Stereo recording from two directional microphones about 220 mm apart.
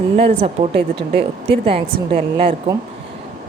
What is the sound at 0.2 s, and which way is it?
Speech, 25° right (ahead or behind).